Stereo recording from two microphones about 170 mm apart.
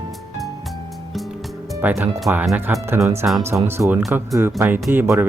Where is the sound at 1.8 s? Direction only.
10° right (ahead or behind).